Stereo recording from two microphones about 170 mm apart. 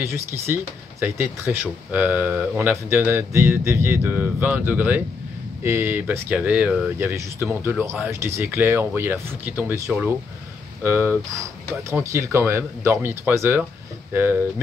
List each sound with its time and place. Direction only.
0.0 s speech: 15° right (ahead or behind)